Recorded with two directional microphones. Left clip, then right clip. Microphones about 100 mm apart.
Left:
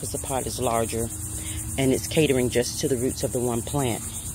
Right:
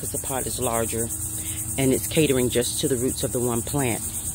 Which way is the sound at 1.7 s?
25° right (ahead or behind).